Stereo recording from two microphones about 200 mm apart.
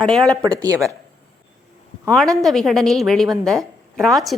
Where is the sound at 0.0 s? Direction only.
5° left (ahead or behind).